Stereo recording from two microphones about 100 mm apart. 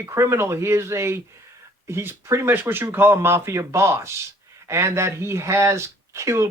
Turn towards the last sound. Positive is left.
turn(degrees=-30)  # may be behind; listen again after turning